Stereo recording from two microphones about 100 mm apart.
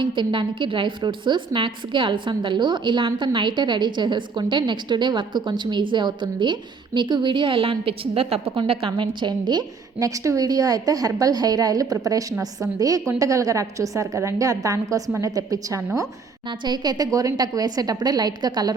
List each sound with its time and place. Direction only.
0.0 s a woman's voice: 55° right (ahead or behind)
8.9 s a woman's voice: 50° right (ahead or behind)
16.5 s a woman's voice: 45° right (ahead or behind)